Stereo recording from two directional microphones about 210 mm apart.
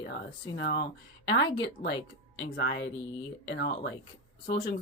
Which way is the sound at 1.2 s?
55° left (ahead or behind).